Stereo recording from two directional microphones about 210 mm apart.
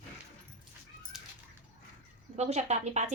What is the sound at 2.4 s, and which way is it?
Speech, 30° right (ahead or behind).